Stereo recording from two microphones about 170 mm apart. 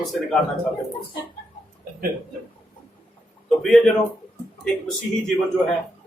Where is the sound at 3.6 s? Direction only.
Centre (ahead or behind).